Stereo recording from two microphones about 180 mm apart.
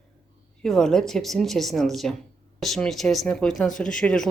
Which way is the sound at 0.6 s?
5° left (ahead or behind).